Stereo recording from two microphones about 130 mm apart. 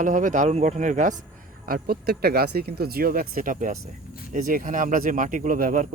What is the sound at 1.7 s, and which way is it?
Speech, 90° right.